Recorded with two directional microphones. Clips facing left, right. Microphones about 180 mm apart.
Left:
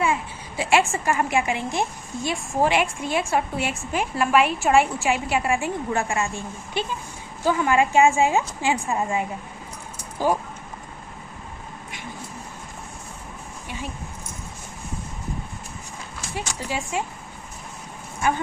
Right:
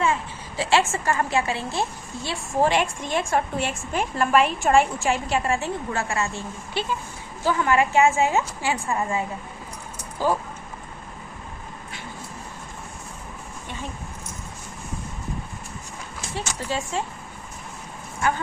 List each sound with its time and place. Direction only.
0.0 s a woman's voice: 10° left (ahead or behind)
16.6 s a woman's voice: 10° left (ahead or behind)